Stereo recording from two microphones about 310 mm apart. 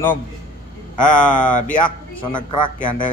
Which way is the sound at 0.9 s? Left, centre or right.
Left.